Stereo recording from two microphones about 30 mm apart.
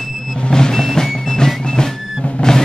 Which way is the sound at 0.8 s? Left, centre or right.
Centre.